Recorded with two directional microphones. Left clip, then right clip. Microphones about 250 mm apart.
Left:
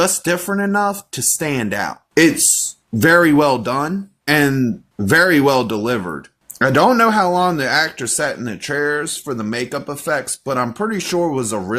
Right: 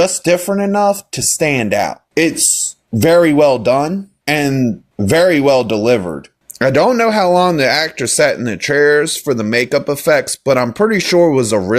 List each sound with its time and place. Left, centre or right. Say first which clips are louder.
0.0 s speech: right 5 dB; centre